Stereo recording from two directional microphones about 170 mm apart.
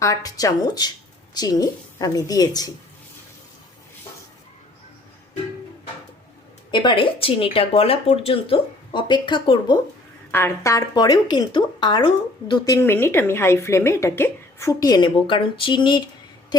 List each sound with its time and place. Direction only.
0.0 s a woman's voice: 20° left (ahead or behind)
6.7 s speech: 30° left (ahead or behind)
10.3 s a woman's voice: 15° left (ahead or behind)